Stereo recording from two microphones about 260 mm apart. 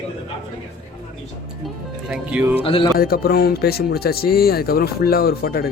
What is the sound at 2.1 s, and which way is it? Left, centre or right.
Speech, centre.